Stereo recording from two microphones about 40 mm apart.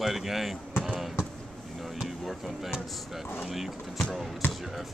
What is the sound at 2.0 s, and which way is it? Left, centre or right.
Speech, centre.